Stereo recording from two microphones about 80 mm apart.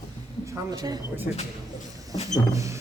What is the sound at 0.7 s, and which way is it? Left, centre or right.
Speech, right.